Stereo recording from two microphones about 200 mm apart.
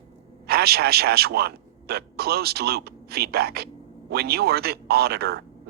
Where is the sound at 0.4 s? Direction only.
50° right (ahead or behind).